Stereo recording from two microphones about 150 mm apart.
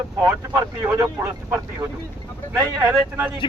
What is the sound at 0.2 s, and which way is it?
Speech, 20° right (ahead or behind).